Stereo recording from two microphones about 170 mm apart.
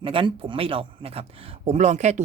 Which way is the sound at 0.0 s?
30° right (ahead or behind).